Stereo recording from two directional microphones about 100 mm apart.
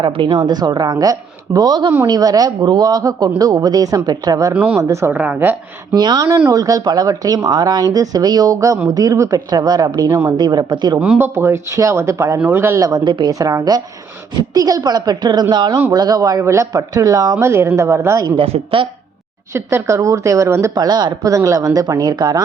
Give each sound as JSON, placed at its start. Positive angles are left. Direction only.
{"t": 0.1, "sound": "a woman's voice", "side_deg": -60}
{"t": 4.5, "sound": "a woman's voice", "side_deg": -15}
{"t": 4.8, "sound": "speech", "side_deg": -30}
{"t": 5.1, "sound": "a woman's voice", "side_deg": -15}
{"t": 5.9, "sound": "a woman's voice", "side_deg": -45}
{"t": 11.2, "sound": "speech", "side_deg": -25}
{"t": 12.9, "sound": "a woman's voice", "side_deg": -45}
{"t": 18.3, "sound": "a woman's voice", "side_deg": -65}
{"t": 19.5, "sound": "speech", "side_deg": -30}